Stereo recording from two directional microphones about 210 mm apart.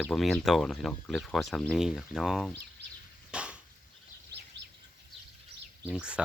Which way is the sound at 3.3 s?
5° right (ahead or behind).